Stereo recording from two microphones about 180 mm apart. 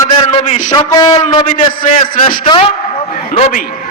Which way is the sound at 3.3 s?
35° left (ahead or behind).